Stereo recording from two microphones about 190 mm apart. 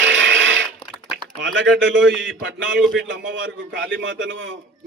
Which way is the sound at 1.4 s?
80° right.